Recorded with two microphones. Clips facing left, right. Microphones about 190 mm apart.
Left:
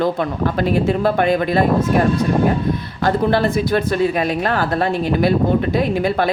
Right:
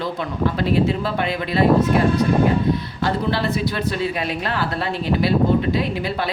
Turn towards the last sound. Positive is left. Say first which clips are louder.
# left 5 dB
turn(degrees=50)  # may be behind; listen again after turning